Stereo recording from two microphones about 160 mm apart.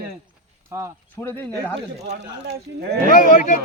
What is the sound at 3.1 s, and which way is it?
Speech, 55° left (ahead or behind).